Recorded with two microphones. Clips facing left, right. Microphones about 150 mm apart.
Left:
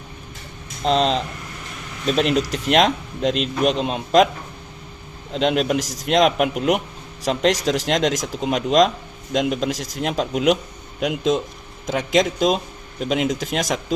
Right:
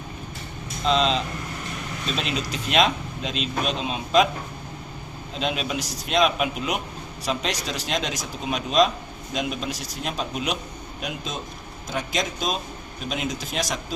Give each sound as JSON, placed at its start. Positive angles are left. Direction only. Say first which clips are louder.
{"t": 0.9, "sound": "speech", "louder": "left 3 dB", "side_deg": 60}
{"t": 5.3, "sound": "speech", "louder": "left 8 dB", "side_deg": 70}